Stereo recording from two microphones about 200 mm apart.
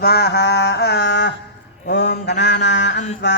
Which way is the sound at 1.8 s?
60° left (ahead or behind).